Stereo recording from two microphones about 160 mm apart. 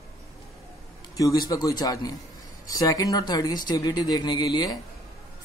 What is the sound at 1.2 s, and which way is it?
A man's voice, 20° left (ahead or behind).